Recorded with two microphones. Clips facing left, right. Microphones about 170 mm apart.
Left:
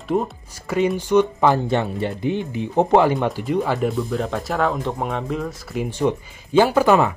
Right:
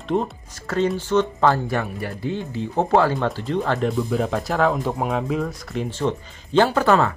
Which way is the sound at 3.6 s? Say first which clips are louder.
Even; centre (ahead or behind).